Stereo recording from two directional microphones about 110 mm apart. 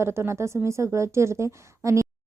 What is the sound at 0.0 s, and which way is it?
Speech, 25° right (ahead or behind).